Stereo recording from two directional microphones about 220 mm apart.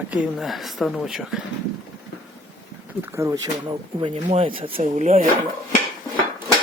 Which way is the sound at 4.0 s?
25° right (ahead or behind).